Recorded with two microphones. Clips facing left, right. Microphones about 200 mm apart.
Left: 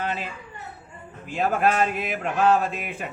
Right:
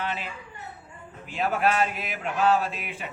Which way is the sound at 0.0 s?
45° left (ahead or behind).